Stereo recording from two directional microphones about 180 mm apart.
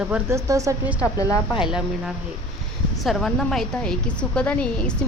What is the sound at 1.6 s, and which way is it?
Speech, 5° right (ahead or behind).